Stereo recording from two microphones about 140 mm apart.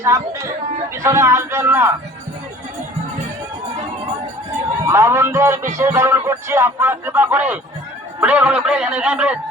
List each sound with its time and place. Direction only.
0.0 s speech: 20° right (ahead or behind)
4.9 s music: 20° right (ahead or behind)